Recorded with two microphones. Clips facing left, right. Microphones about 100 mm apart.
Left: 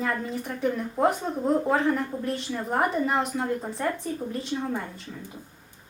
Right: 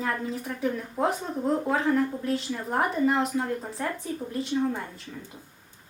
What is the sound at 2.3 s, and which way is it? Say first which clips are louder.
A woman's voice: even; centre (ahead or behind).